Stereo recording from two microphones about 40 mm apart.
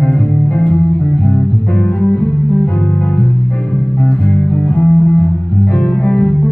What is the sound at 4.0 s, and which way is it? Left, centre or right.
Music, left.